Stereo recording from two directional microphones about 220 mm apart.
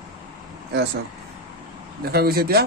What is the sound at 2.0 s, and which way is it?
Speech, 45° right (ahead or behind).